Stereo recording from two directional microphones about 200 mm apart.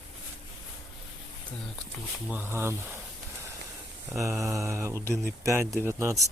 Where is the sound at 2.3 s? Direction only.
10° right (ahead or behind).